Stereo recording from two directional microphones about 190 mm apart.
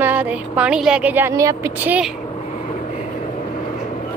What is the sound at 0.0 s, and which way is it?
Speech, 10° right (ahead or behind).